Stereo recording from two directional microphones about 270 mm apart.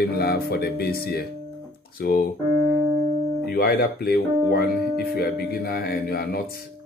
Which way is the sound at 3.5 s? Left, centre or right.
Left.